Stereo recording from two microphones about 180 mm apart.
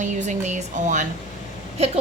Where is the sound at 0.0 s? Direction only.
40° right (ahead or behind).